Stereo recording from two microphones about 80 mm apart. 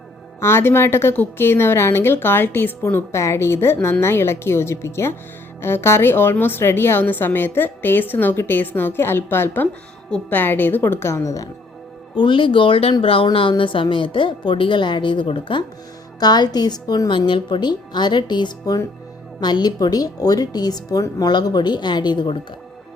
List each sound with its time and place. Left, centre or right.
0.3 s a woman's voice: left
12.1 s a woman's voice: left
16.2 s a woman's voice: left